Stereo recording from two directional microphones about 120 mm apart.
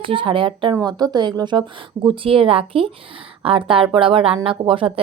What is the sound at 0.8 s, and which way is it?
Speech, 30° right (ahead or behind).